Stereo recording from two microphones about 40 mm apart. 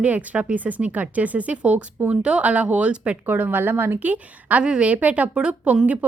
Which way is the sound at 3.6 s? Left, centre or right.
Right.